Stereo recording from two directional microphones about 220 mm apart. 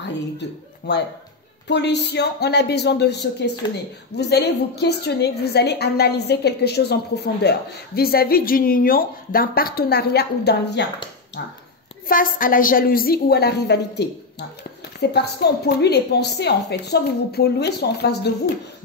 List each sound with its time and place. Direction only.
0.9 s speech: 50° left (ahead or behind)
12.1 s speech: 40° left (ahead or behind)